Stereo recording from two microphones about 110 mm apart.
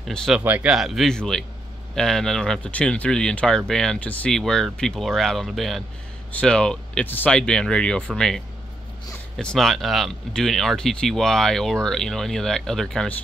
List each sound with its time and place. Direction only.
0.1 s speech: 5° left (ahead or behind)
0.4 s speech: 15° right (ahead or behind)
0.7 s speech: centre (ahead or behind)
9.4 s speech: 5° left (ahead or behind)